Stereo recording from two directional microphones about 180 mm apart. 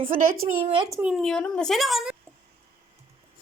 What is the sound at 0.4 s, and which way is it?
Speech, 30° right (ahead or behind).